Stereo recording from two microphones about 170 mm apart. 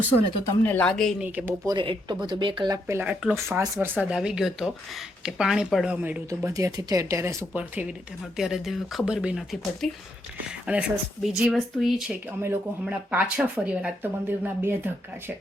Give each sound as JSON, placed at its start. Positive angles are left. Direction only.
{"t": 0.6, "sound": "speech", "side_deg": 10}
{"t": 1.2, "sound": "speech", "side_deg": -10}
{"t": 1.6, "sound": "speech", "side_deg": -30}
{"t": 2.7, "sound": "speech", "side_deg": -15}
{"t": 6.5, "sound": "speech", "side_deg": -20}